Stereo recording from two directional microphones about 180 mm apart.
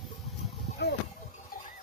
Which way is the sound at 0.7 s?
70° left (ahead or behind).